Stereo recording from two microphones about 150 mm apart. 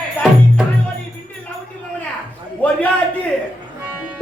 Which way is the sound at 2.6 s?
10° left (ahead or behind).